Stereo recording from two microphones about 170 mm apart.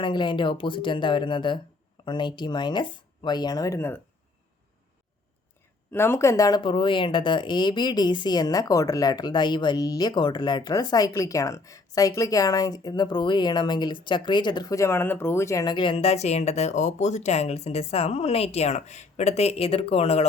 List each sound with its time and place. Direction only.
0.0 s speech: 25° left (ahead or behind)
5.9 s speech: 15° left (ahead or behind); by 20.2 s 35° left (ahead or behind)